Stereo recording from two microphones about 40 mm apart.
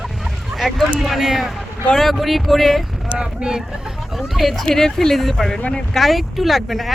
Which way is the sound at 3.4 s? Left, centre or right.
Centre.